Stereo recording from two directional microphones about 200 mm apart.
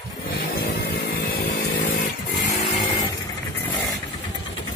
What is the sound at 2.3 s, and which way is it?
Vehicle, 20° left (ahead or behind).